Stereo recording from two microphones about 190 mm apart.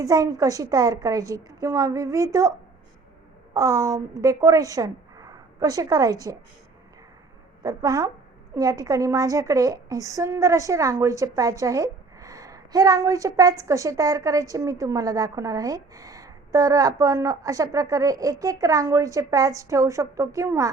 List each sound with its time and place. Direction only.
0.0 s a woman's voice: 20° right (ahead or behind)
7.6 s a woman's voice: 20° right (ahead or behind)